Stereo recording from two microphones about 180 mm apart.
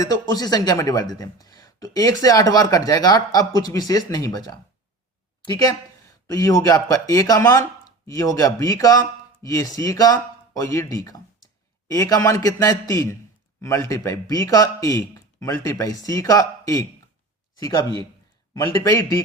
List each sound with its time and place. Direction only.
0.0 s speech: 20° left (ahead or behind)
6.2 s speech: 20° left (ahead or behind)